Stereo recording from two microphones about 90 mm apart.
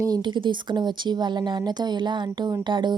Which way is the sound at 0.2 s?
60° right (ahead or behind).